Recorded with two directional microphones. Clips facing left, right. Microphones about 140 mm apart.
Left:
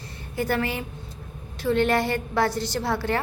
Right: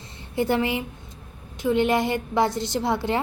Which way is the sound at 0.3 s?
20° right (ahead or behind).